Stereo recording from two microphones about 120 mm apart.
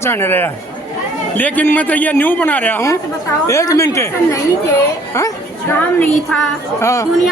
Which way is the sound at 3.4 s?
30° left (ahead or behind).